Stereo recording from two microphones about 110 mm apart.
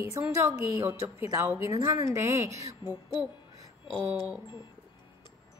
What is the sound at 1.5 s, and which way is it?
A woman's voice, 25° right (ahead or behind).